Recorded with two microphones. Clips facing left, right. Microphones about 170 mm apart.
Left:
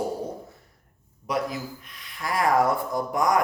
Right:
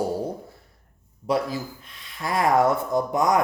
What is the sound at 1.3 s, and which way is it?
Speech, 30° right (ahead or behind).